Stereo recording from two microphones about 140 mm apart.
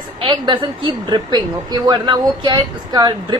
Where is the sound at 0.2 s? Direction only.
35° right (ahead or behind).